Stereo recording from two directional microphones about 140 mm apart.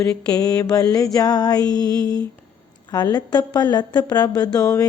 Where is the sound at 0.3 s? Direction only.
25° left (ahead or behind).